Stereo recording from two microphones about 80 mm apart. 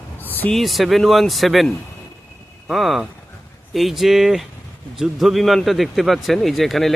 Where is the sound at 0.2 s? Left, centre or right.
Left.